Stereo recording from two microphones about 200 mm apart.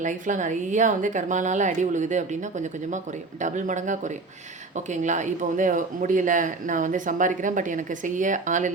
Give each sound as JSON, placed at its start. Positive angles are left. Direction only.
{"t": 0.0, "sound": "speech", "side_deg": -40}